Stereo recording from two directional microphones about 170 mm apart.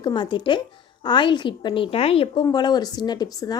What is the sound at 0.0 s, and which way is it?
A woman's voice, 30° left (ahead or behind).